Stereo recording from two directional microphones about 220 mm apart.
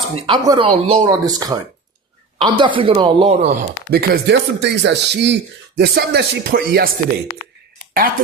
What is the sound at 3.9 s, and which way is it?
Speech, 45° right (ahead or behind).